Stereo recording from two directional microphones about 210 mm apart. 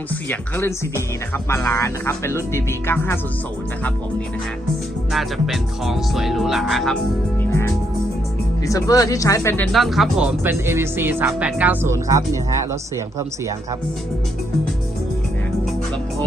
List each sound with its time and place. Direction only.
0.3 s speech: 10° left (ahead or behind)
5.1 s speech: centre (ahead or behind)
9.7 s speech: centre (ahead or behind)